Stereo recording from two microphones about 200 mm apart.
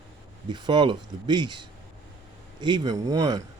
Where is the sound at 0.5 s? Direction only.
20° right (ahead or behind).